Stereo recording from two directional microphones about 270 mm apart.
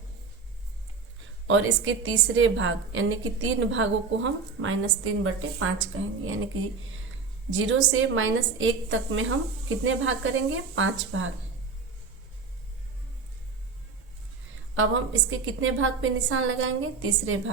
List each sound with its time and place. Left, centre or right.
1.5 s a woman's voice: right
7.6 s a woman's voice: right
15.4 s a woman's voice: right